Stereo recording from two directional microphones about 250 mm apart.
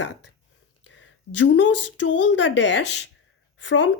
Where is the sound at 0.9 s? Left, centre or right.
Left.